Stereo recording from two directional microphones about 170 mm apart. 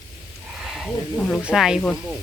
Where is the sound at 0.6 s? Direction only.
Centre (ahead or behind).